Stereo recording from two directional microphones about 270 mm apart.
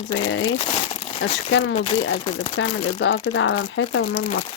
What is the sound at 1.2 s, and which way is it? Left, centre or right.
Speech, left.